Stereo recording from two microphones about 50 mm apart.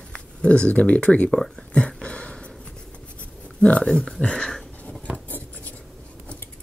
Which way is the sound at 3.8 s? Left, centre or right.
Centre.